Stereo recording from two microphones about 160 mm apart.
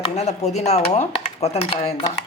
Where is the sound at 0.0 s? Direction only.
45° left (ahead or behind).